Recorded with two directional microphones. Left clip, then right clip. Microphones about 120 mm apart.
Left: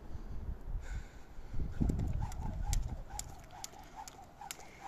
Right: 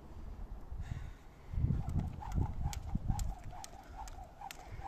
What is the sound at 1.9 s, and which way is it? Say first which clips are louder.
Clip-clop: left 2 dB; 10° left (ahead or behind).